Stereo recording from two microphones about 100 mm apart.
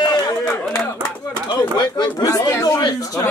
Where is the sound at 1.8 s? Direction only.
45° left (ahead or behind).